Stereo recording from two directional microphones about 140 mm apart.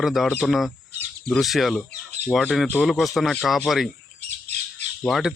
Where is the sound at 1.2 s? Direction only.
Centre (ahead or behind).